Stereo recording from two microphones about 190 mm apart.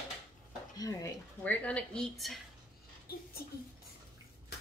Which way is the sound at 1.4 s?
5° left (ahead or behind).